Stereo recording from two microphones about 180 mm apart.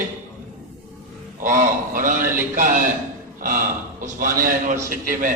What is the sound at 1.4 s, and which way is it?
A man's voice, 45° right (ahead or behind).